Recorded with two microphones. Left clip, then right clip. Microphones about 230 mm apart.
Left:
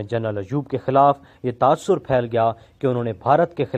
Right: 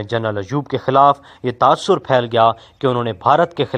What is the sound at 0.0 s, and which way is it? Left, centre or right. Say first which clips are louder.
Speech: right 4 dB; right.